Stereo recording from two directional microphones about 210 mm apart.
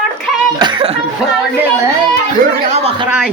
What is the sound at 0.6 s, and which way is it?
Chuckle, 25° right (ahead or behind).